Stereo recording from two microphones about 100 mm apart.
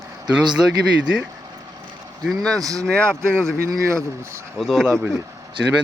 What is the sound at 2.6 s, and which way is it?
Speech, 35° right (ahead or behind).